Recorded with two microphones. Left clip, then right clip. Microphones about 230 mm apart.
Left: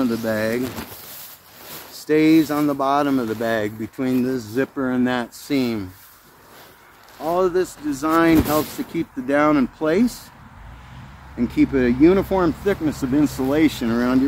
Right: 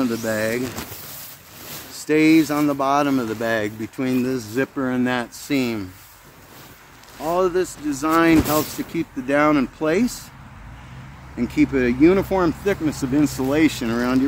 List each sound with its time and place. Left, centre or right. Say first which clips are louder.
0.0 s speech: left 1 dB; centre
2.0 s speech: even; centre
7.2 s speech: even; centre
11.3 s speech: left 1 dB; centre